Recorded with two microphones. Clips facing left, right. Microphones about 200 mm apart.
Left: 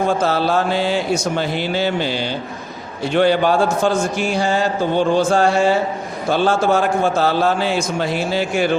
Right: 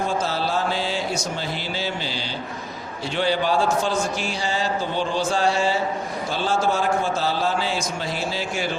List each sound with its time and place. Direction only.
0.2 s a man's voice: 60° left (ahead or behind)